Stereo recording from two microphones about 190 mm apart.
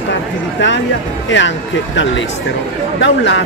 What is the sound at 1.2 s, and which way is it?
Speech, 75° left (ahead or behind).